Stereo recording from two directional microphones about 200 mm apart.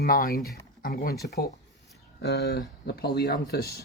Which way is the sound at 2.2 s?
55° left (ahead or behind).